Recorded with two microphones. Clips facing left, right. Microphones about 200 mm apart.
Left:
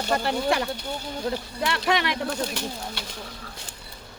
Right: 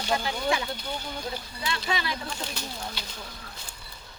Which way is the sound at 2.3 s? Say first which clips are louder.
Left 7 dB; 60° left (ahead or behind).